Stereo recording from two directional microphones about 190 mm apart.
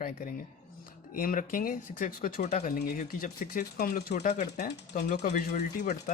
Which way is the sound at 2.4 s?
40° left (ahead or behind).